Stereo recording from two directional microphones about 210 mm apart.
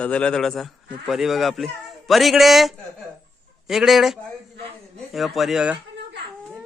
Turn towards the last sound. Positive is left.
turn(degrees=-5)  # may be behind; listen again after turning